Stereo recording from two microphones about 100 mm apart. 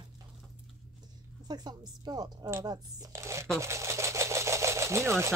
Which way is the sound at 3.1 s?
30° right (ahead or behind).